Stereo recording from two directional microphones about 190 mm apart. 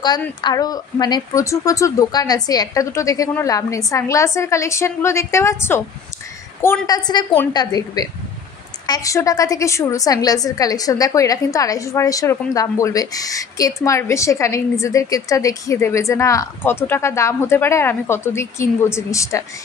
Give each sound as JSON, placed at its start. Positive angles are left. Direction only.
{"t": 0.0, "sound": "a woman's voice", "side_deg": 20}